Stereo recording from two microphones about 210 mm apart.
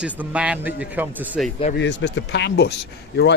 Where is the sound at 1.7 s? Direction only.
60° left (ahead or behind).